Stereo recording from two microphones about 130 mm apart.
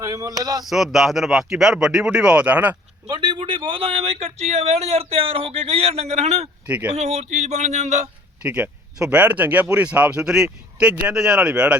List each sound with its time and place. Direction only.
0.0 s speech: 25° right (ahead or behind)
0.6 s speech: centre (ahead or behind)
3.1 s speech: 35° right (ahead or behind); by 6.5 s 55° right (ahead or behind)
6.7 s speech: 10° right (ahead or behind)
6.9 s speech: 55° right (ahead or behind)
8.4 s speech: 10° right (ahead or behind)